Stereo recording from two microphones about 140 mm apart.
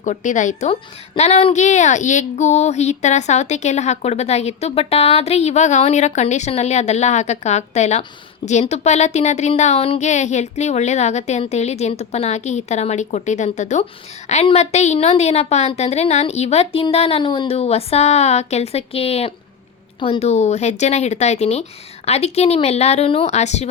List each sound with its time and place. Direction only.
0.0 s speech: 65° left (ahead or behind)
0.7 s speech: 50° left (ahead or behind)